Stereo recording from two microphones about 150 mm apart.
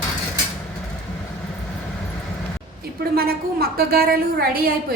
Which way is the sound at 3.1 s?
90° right.